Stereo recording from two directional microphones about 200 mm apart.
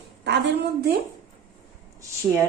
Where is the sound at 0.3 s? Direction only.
55° right (ahead or behind).